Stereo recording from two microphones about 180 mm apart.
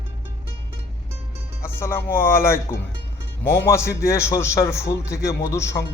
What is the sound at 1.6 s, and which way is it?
A man's voice, 15° left (ahead or behind).